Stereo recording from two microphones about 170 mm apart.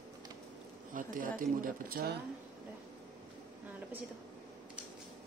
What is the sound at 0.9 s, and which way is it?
Speech, 55° right (ahead or behind).